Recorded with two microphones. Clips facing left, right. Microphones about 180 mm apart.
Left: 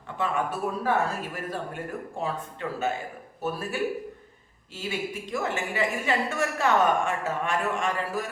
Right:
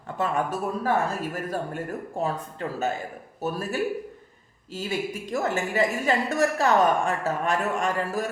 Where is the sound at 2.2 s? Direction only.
40° right (ahead or behind).